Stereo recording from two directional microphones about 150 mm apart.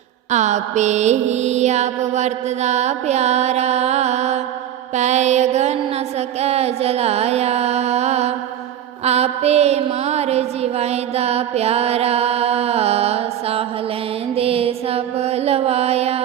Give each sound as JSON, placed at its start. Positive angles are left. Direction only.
{"t": 0.3, "sound": "mantra", "side_deg": -50}
{"t": 6.1, "sound": "music", "side_deg": -45}
{"t": 9.0, "sound": "mantra", "side_deg": -45}
{"t": 14.3, "sound": "music", "side_deg": -40}